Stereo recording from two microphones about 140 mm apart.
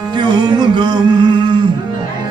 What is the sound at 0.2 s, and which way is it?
Music, 30° right (ahead or behind).